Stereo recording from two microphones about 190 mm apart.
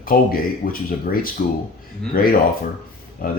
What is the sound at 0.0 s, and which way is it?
Speech, 50° left (ahead or behind).